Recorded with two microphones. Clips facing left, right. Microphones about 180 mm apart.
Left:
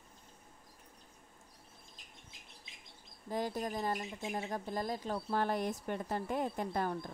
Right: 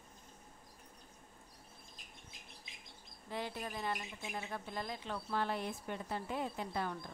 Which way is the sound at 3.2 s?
40° left (ahead or behind).